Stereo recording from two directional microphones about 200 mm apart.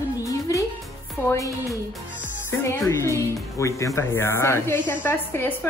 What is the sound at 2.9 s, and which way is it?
A woman's voice, 15° left (ahead or behind).